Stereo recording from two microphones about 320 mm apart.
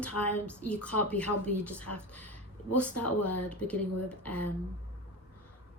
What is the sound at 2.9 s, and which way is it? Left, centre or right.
Speech, left.